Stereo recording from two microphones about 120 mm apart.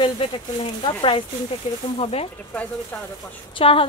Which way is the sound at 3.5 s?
50° left (ahead or behind).